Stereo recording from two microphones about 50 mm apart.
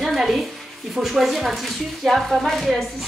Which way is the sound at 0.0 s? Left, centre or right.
Centre.